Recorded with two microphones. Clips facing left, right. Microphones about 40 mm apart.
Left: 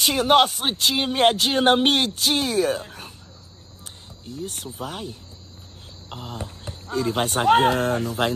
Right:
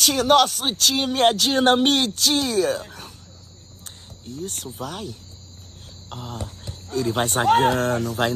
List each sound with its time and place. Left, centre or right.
0.0 s speech: left
4.4 s speech: left
6.6 s a sound: left
7.2 s speech: left